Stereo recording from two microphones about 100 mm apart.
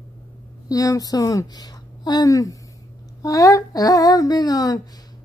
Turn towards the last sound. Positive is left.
turn(degrees=40)  # may be behind; listen again after turning